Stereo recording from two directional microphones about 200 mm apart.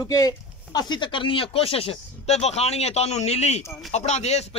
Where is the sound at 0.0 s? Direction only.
20° left (ahead or behind).